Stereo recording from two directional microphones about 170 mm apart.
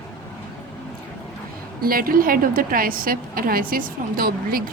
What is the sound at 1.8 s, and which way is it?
A woman's voice, 60° right (ahead or behind).